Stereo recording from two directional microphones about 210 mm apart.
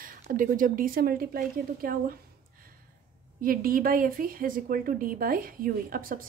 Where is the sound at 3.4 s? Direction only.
40° right (ahead or behind).